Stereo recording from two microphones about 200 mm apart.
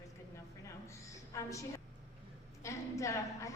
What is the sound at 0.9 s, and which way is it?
A woman's voice, 15° left (ahead or behind).